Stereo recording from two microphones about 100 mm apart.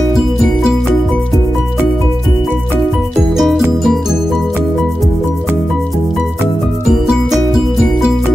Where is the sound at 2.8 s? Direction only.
5° right (ahead or behind).